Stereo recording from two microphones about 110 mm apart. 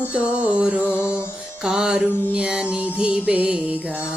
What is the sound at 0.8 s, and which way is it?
Music, 20° left (ahead or behind).